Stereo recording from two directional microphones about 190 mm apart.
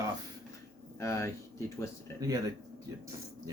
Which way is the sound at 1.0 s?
15° left (ahead or behind).